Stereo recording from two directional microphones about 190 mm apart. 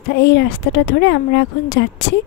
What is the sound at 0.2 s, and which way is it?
Speech, 65° left (ahead or behind).